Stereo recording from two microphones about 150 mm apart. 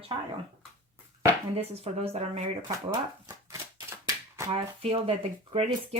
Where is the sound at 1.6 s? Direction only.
40° right (ahead or behind).